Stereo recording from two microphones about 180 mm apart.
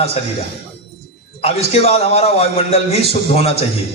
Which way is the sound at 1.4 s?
35° left (ahead or behind).